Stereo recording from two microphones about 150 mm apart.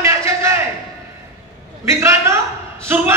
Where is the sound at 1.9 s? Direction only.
20° right (ahead or behind).